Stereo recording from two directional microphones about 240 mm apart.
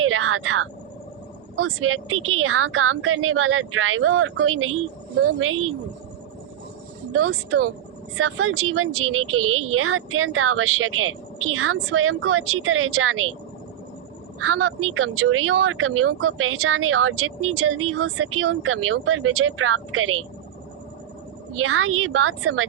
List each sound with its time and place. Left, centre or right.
0.0 s a sound: right
1.5 s speech: right
8.2 s speech: right
14.4 s speech: right
21.5 s speech: right